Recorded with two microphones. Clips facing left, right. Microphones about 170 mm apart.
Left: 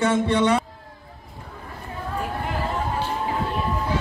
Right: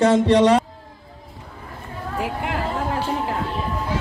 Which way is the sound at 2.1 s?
85° right.